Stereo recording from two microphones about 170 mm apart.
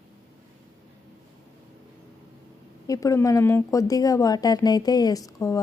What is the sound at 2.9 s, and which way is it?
A woman's voice, 20° left (ahead or behind).